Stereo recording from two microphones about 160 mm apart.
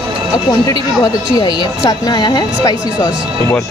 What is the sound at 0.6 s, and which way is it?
Speech, 20° left (ahead or behind).